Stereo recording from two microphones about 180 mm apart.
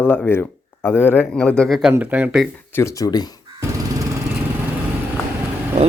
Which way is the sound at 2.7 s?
15° left (ahead or behind).